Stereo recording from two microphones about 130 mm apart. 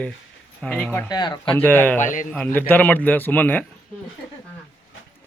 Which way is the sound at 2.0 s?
85° left.